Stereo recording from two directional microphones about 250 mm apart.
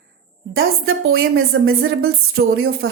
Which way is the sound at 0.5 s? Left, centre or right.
Right.